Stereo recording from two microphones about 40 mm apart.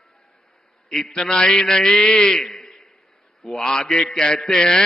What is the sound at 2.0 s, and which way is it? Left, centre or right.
Speech, left.